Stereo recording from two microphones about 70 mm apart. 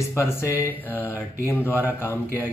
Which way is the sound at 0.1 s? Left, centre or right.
Left.